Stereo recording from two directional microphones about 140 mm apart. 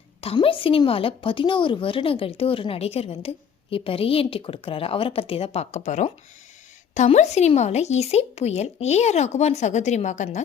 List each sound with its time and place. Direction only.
0.3 s a woman's voice: 40° left (ahead or behind); by 10.4 s 55° left (ahead or behind)